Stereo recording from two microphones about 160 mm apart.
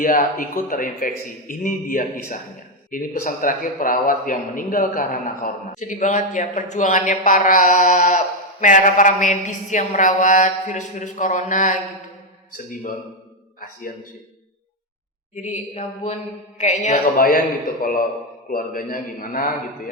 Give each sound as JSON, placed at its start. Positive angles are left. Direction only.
{"t": 0.0, "sound": "a man's voice", "side_deg": 60}
{"t": 13.6, "sound": "a man's voice", "side_deg": 60}
{"t": 15.4, "sound": "a man's voice", "side_deg": 45}